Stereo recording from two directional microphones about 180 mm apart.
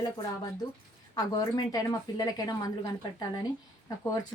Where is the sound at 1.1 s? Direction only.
20° left (ahead or behind).